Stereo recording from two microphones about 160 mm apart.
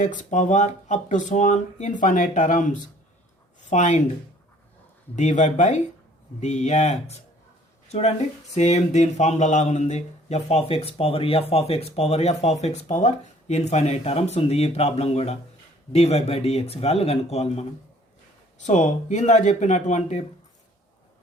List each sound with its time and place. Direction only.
0.0 s speech: 55° left (ahead or behind)
5.1 s speech: 50° left (ahead or behind)